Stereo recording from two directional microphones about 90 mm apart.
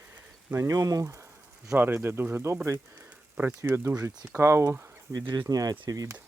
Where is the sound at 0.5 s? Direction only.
35° right (ahead or behind).